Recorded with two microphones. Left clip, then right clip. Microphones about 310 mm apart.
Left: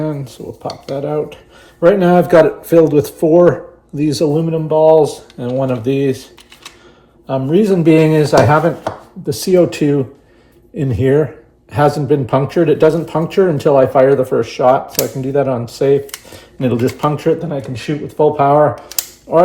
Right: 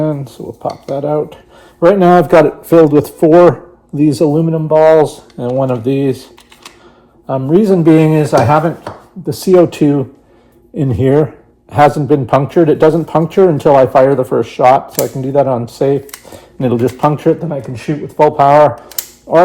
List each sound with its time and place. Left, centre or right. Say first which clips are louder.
0.0 s a man's voice: right 5 dB; centre
7.3 s a man's voice: right 2 dB; centre
16.3 s a sound: right 2 dB; centre
17.2 s a man's voice: right 2 dB; centre